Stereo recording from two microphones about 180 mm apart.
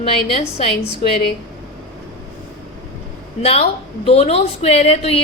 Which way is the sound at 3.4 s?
30° left (ahead or behind).